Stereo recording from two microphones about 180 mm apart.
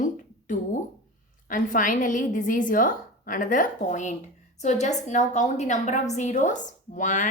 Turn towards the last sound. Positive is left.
turn(degrees=45)  # may be behind; listen again after turning